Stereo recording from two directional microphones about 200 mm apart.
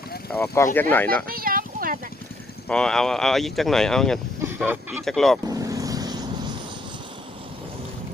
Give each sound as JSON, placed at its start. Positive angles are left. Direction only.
{"t": 0.3, "sound": "speech", "side_deg": 10}
{"t": 1.3, "sound": "a sound", "side_deg": -45}
{"t": 2.6, "sound": "speech", "side_deg": 5}
{"t": 4.4, "sound": "a sound", "side_deg": -10}
{"t": 5.0, "sound": "speech", "side_deg": 0}
{"t": 5.5, "sound": "vehicle", "side_deg": -15}